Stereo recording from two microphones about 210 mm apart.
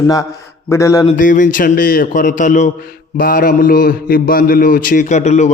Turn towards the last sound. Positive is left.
turn(degrees=30)  # may be behind; listen again after turning